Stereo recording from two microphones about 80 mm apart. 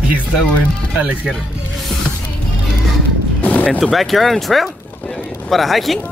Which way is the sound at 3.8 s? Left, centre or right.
Centre.